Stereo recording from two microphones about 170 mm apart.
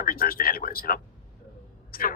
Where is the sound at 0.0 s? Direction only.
60° left (ahead or behind).